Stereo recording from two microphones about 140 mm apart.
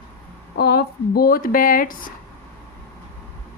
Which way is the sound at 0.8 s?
90° left.